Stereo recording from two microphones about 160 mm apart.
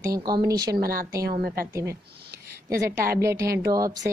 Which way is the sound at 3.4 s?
75° right (ahead or behind).